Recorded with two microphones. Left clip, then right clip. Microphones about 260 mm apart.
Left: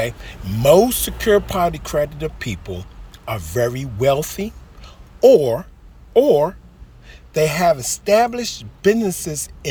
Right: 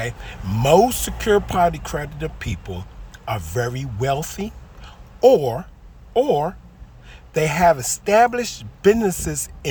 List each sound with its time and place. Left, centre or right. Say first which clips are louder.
0.0 s speech: left 5 dB; centre